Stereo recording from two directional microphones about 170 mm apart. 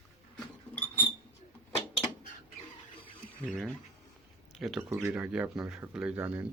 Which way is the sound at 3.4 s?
Centre (ahead or behind).